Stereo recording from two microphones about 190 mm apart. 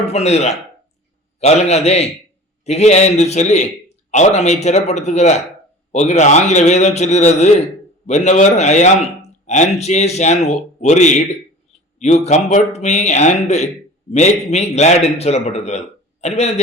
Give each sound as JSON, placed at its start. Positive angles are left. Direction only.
{"t": 0.1, "sound": "a man's voice", "side_deg": 35}